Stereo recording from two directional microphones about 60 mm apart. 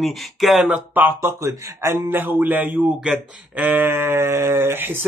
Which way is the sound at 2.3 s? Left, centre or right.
Right.